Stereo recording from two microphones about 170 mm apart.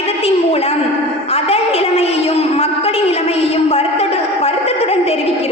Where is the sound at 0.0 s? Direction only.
35° left (ahead or behind).